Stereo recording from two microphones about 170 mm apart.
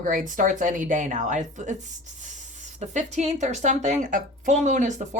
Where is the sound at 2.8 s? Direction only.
45° right (ahead or behind).